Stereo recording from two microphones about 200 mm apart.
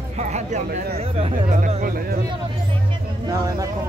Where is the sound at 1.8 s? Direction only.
45° right (ahead or behind).